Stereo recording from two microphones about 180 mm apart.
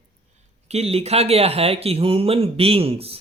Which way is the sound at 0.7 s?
35° right (ahead or behind).